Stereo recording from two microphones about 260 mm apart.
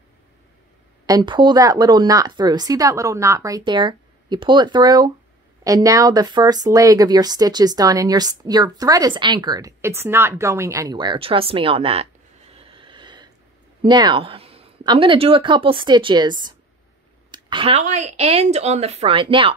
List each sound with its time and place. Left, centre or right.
1.0 s a woman's voice: centre
12.5 s a sound: right
13.8 s speech: centre